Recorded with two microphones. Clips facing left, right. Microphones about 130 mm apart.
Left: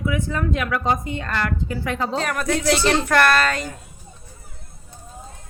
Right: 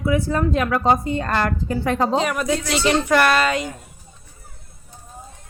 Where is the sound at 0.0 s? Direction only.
35° right (ahead or behind).